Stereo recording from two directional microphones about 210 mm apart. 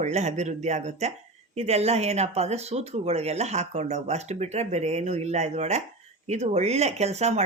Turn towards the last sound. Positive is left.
turn(degrees=-30)  # may be behind; listen again after turning